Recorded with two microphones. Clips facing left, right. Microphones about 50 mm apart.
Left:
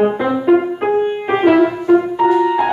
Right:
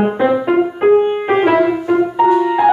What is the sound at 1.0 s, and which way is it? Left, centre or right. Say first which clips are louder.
Music: right 1 dB; centre.